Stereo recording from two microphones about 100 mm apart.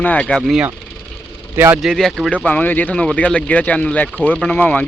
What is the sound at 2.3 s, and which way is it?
Speech, 15° left (ahead or behind).